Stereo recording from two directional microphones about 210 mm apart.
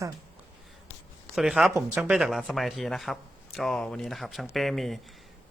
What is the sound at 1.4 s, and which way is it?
Speech, 5° right (ahead or behind).